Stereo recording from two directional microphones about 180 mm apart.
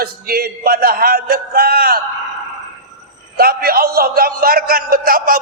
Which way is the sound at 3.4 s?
55° right (ahead or behind).